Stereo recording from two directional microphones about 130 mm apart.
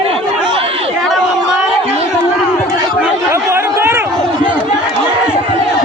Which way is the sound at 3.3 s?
20° right (ahead or behind).